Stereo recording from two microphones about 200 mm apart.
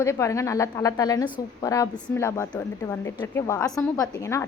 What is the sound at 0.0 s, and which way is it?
A woman's voice, 15° left (ahead or behind).